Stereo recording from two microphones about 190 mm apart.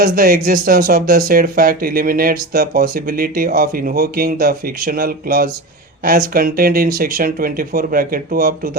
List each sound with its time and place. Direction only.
0.0 s speech: 50° right (ahead or behind)